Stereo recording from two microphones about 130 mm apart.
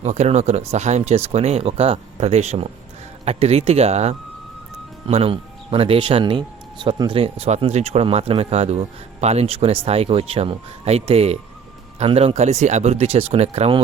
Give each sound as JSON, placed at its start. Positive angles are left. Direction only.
{"t": 0.0, "sound": "speech", "side_deg": -60}